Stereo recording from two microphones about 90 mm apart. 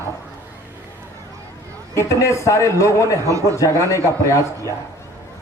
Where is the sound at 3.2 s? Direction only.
35° right (ahead or behind).